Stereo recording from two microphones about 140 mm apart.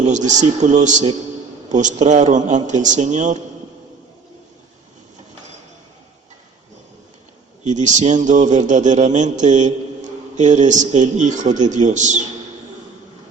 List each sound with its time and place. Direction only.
0.0 s a man's voice: 60° right (ahead or behind)
7.6 s a man's voice: 60° right (ahead or behind)